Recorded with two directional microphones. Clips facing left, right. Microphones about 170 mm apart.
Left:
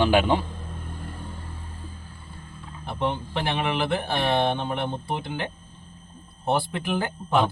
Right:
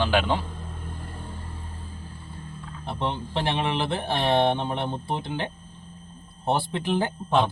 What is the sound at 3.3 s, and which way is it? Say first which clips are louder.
Speech: even; 25° right (ahead or behind).